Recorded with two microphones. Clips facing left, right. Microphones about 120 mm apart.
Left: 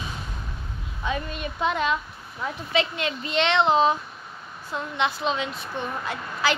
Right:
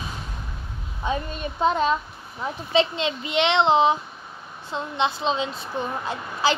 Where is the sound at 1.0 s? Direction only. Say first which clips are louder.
Right 2 dB; 35° right (ahead or behind).